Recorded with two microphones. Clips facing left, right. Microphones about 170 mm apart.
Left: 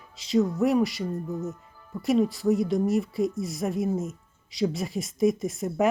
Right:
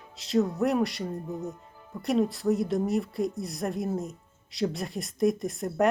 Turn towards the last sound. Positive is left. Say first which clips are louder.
# left 1 dB
turn(degrees=0)  # may be behind; listen again after turning